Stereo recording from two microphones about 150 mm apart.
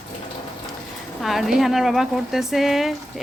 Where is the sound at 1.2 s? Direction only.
Centre (ahead or behind).